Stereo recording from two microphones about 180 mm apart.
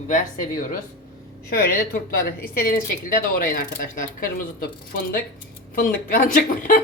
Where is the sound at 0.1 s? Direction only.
45° left (ahead or behind).